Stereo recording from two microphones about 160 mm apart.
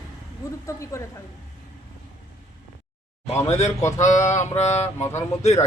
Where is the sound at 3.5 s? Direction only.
45° left (ahead or behind).